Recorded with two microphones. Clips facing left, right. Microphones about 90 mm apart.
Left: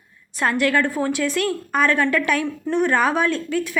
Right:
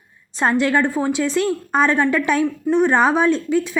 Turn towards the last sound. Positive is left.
turn(degrees=-20)  # may be behind; listen again after turning